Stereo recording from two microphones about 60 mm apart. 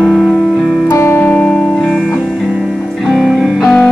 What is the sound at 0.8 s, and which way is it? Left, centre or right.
Music, left.